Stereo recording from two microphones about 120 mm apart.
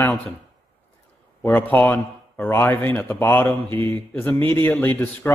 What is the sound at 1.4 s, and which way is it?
A man's voice, 15° left (ahead or behind).